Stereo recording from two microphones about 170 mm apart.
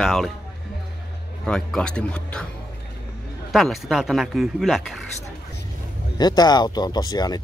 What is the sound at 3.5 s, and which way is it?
Speech, centre (ahead or behind).